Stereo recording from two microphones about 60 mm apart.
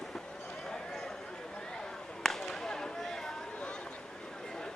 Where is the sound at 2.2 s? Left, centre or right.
Centre.